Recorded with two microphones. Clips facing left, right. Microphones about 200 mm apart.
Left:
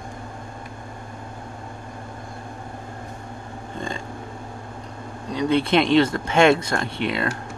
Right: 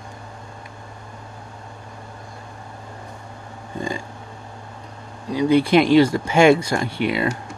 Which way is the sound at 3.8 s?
10° right (ahead or behind).